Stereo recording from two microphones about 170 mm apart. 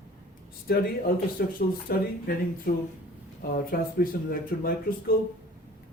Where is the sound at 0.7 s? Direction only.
60° left (ahead or behind).